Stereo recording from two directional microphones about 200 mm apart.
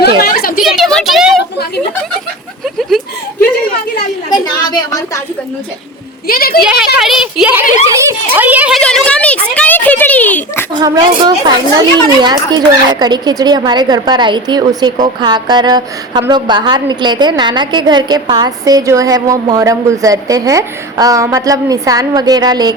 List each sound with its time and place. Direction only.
0.3 s speech: 45° left (ahead or behind)
0.6 s a woman's voice: centre (ahead or behind)
2.6 s a sound: centre (ahead or behind)
4.3 s a woman's voice: 20° left (ahead or behind)
6.2 s speech: 50° left (ahead or behind)
6.7 s speech: 5° right (ahead or behind)
8.8 s a woman's voice: 5° left (ahead or behind)
10.8 s a woman's voice: 20° right (ahead or behind)